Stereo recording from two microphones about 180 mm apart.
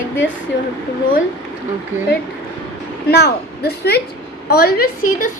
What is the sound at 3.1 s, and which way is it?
A woman's voice, 60° left (ahead or behind).